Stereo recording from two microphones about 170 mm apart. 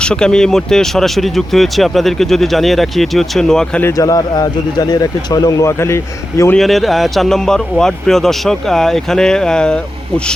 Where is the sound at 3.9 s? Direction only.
20° left (ahead or behind).